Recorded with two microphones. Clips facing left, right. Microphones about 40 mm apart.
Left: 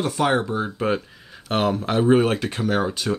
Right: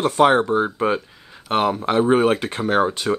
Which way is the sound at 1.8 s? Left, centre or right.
Right.